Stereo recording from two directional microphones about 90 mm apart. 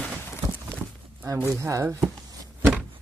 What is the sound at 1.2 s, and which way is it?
Speech, 30° right (ahead or behind).